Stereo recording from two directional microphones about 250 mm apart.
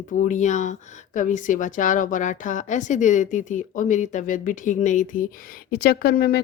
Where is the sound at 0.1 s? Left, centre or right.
Left.